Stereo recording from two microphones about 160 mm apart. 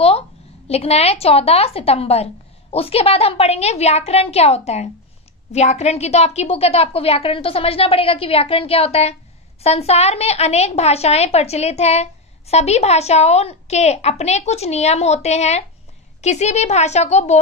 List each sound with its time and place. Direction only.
0.7 s a woman's voice: 40° left (ahead or behind)